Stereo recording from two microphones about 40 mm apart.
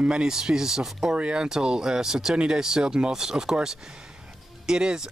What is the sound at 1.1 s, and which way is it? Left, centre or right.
Speech, right.